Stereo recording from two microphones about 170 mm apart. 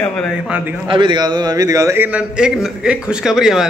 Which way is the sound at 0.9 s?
25° right (ahead or behind).